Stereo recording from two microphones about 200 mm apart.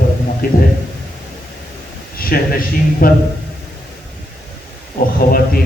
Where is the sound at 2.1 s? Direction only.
45° left (ahead or behind).